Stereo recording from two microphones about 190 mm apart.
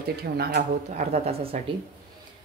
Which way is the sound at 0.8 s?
35° right (ahead or behind).